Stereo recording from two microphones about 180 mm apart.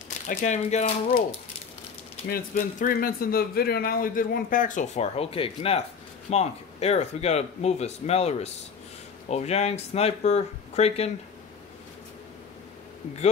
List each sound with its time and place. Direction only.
0.3 s speech: 40° left (ahead or behind)
2.2 s speech: 50° left (ahead or behind); by 11.1 s 35° left (ahead or behind)